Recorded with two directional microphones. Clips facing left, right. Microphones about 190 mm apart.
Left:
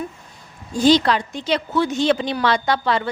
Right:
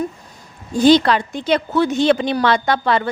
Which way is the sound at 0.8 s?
60° right (ahead or behind).